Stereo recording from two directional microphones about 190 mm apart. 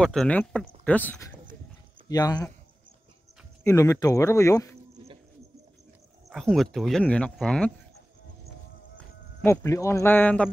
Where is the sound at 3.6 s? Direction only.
15° left (ahead or behind).